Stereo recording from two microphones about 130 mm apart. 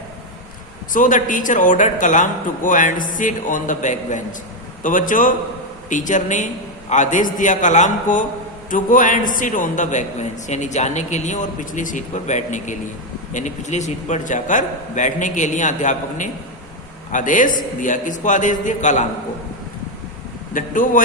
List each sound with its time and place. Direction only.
0.9 s a man's voice: 90° left; by 4.4 s 70° left (ahead or behind)
4.8 s a man's voice: 90° left
5.9 s a man's voice: 80° left
8.7 s a man's voice: 90° left; by 16.3 s 75° left (ahead or behind)
17.1 s a man's voice: 90° left; by 19.0 s 70° left (ahead or behind)
20.5 s a man's voice: 90° left